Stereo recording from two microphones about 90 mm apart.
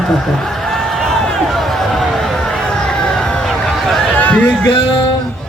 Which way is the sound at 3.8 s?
5° left (ahead or behind).